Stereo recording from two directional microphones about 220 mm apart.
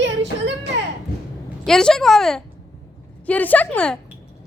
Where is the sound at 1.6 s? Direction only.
5° left (ahead or behind).